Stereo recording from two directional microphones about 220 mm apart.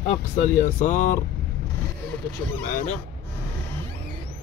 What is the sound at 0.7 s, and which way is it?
Speech, 35° left (ahead or behind).